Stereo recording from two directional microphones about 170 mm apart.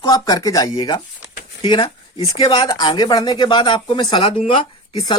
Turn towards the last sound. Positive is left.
turn(degrees=30)  # may be behind; listen again after turning